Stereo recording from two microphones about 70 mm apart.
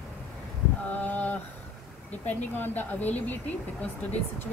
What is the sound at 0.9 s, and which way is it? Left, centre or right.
A woman's voice, left.